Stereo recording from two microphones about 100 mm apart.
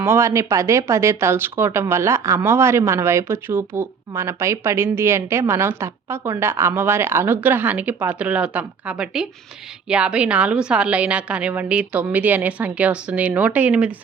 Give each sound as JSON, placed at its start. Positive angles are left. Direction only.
{"t": 0.0, "sound": "a woman's voice", "side_deg": -25}